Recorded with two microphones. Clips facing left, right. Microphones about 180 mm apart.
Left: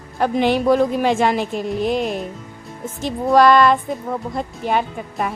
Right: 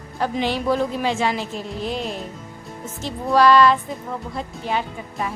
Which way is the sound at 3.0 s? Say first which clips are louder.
Left 3 dB; 50° left (ahead or behind).